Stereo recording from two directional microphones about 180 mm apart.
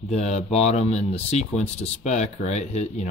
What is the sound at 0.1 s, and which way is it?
Speech, 40° left (ahead or behind).